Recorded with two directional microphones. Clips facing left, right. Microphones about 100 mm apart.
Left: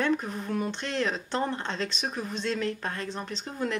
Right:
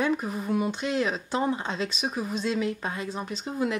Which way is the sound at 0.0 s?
5° right (ahead or behind).